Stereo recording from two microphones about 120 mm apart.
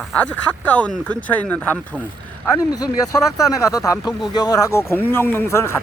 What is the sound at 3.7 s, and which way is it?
Speech, 30° left (ahead or behind).